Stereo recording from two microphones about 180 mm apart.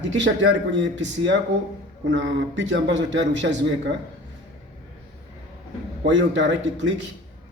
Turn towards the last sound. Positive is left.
turn(degrees=-90)